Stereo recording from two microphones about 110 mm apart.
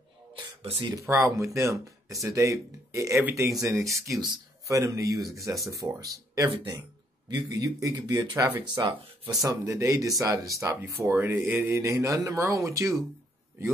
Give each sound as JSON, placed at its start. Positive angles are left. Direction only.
{"t": 0.3, "sound": "music", "side_deg": -55}
{"t": 0.9, "sound": "speech", "side_deg": -30}
{"t": 8.7, "sound": "speech", "side_deg": -45}
{"t": 9.3, "sound": "speech", "side_deg": -30}
{"t": 11.3, "sound": "mantra", "side_deg": -15}
{"t": 11.8, "sound": "speech", "side_deg": -30}